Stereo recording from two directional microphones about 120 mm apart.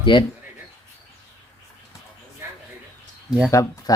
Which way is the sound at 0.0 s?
40° left (ahead or behind).